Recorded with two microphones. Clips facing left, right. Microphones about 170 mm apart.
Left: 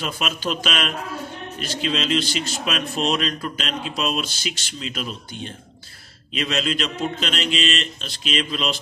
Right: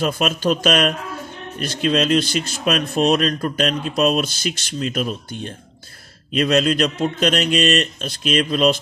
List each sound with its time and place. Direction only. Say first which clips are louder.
0.0 s speech: right 7 dB; 45° right (ahead or behind)